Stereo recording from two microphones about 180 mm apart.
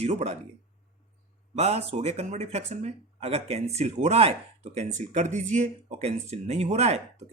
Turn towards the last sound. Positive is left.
turn(degrees=-35)  # may be behind; listen again after turning